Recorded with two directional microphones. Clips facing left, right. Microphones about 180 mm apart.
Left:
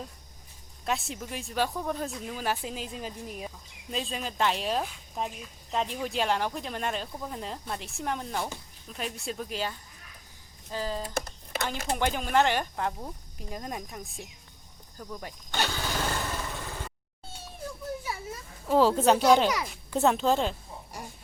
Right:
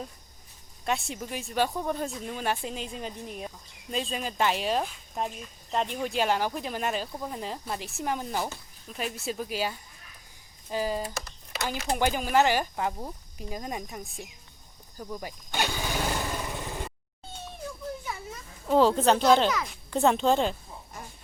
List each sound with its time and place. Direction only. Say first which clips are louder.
0.9 s speech: right 1 dB; centre (ahead or behind)
11.5 s a sound: left 1 dB; 50° left (ahead or behind)
11.9 s speech: right 1 dB; 5° right (ahead or behind)
14.9 s motorcycle: right 3 dB; 10° right (ahead or behind)
18.7 s speech: even; 5° left (ahead or behind)